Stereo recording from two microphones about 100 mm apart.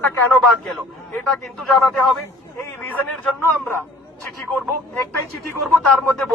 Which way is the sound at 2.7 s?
15° left (ahead or behind).